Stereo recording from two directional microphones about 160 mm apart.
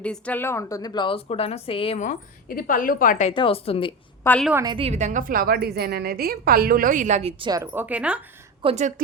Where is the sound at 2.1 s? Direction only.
60° left (ahead or behind).